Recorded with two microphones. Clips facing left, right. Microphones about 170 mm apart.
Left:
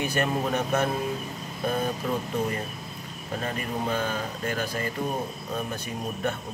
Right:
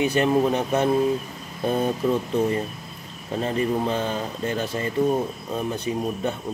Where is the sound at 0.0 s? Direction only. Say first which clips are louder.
Right 7 dB; 20° right (ahead or behind).